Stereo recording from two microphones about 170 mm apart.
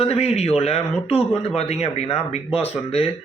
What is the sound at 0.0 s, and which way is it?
A man's voice, 35° left (ahead or behind).